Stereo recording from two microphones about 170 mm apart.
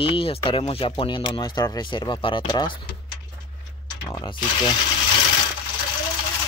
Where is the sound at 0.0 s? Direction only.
30° left (ahead or behind).